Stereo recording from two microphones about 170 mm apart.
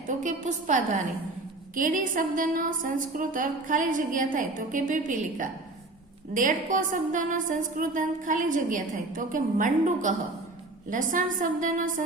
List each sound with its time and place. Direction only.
0.1 s a woman's voice: 45° right (ahead or behind)